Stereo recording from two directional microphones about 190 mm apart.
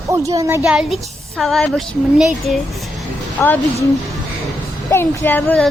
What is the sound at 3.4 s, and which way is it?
Speech, 15° left (ahead or behind).